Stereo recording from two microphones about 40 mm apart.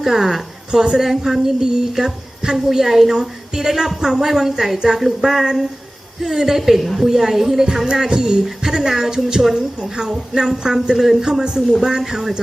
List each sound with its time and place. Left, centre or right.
0.0 s a woman's voice: centre
11.3 s a woman's voice: centre